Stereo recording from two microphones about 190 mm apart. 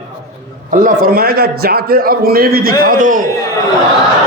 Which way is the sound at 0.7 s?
45° right (ahead or behind).